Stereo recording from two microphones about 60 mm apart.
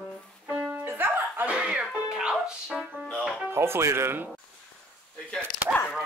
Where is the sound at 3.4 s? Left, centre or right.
Right.